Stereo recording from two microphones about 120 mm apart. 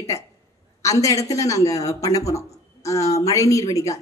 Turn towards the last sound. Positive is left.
turn(degrees=30)  # may be behind; listen again after turning